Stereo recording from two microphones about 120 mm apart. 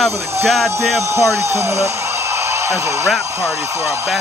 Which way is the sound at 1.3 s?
20° right (ahead or behind).